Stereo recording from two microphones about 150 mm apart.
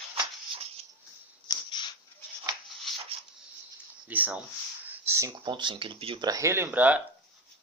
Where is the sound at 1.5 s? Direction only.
30° left (ahead or behind).